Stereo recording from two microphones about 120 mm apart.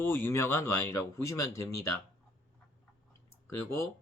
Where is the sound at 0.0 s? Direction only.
20° left (ahead or behind).